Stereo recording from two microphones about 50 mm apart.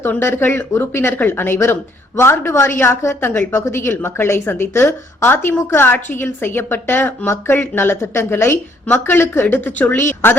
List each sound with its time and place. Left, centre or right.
0.2 s speech: left
1.5 s a woman's voice: left
8.9 s speech: left
9.2 s speech: left
10.0 s speech: left